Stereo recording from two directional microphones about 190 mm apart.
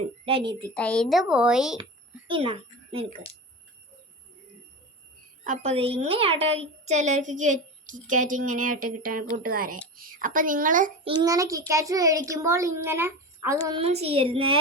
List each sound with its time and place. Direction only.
0.3 s a woman's voice: 25° right (ahead or behind)
0.7 s a woman's voice: 5° left (ahead or behind)
2.2 s speech: 30° right (ahead or behind)
5.5 s a woman's voice: 30° right (ahead or behind)
11.0 s a child's voice: 20° right (ahead or behind)
13.7 s a woman's voice: 30° right (ahead or behind)